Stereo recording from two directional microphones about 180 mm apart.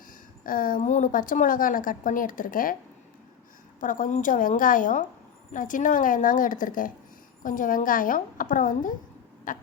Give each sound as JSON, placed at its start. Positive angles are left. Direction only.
{"t": 0.4, "sound": "a woman's voice", "side_deg": 50}
{"t": 3.8, "sound": "a woman's voice", "side_deg": 50}